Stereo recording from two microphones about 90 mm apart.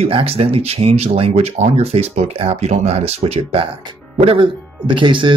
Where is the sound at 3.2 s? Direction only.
90° right; by 5.3 s 65° right (ahead or behind).